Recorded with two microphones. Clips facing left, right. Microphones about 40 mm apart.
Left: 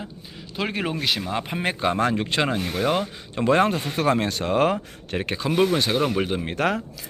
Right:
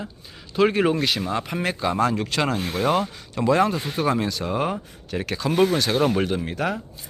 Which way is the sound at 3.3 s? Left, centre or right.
Left.